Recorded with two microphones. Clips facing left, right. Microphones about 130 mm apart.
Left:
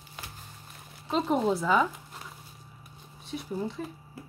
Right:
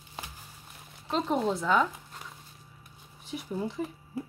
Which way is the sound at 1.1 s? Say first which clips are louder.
Left 2 dB; 5° left (ahead or behind).